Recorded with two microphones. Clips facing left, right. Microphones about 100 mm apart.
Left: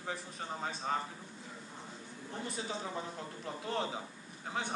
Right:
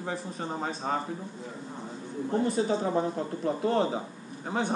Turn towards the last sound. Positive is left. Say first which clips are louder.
# right 9 dB
turn(degrees=-40)  # may be behind; listen again after turning